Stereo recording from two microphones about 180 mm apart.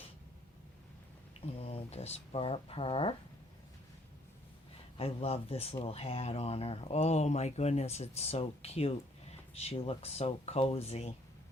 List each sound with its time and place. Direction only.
1.5 s speech: 35° left (ahead or behind)
4.9 s speech: 35° left (ahead or behind)